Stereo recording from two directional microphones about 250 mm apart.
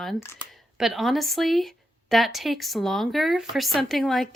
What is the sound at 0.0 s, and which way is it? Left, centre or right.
A woman's voice, centre.